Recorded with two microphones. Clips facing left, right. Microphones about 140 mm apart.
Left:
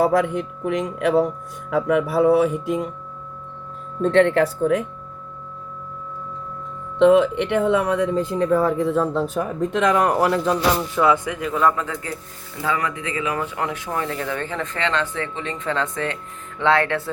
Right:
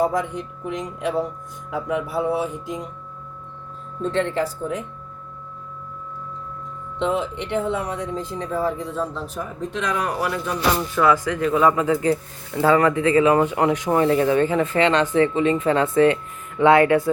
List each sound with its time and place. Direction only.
0.0 s speech: 65° left (ahead or behind)
4.0 s speech: 65° left (ahead or behind)
7.0 s speech: 65° left (ahead or behind); by 10.3 s 50° left (ahead or behind)
10.3 s speech: 35° left (ahead or behind)
10.9 s speech: 20° left (ahead or behind)
11.3 s speech: centre (ahead or behind)
11.8 s speech: 20° right (ahead or behind)
12.6 s speech: 40° right (ahead or behind)
13.5 s speech: 15° right (ahead or behind)